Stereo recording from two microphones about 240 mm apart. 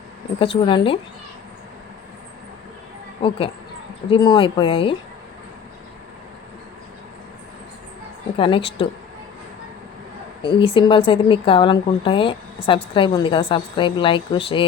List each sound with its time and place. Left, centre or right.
0.3 s a woman's voice: left
3.2 s a woman's voice: left
8.4 s a woman's voice: left
10.4 s a woman's voice: left